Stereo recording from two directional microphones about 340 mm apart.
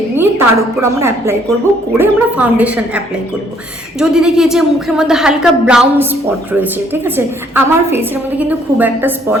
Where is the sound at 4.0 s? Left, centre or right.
Centre.